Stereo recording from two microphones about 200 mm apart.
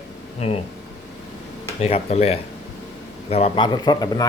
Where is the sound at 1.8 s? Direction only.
30° left (ahead or behind).